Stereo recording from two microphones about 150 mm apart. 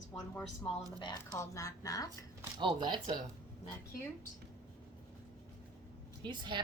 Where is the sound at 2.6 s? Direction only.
30° right (ahead or behind).